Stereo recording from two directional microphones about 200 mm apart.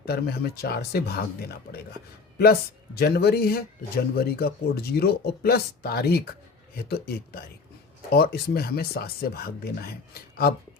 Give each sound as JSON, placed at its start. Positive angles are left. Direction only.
{"t": 0.0, "sound": "speech", "side_deg": 50}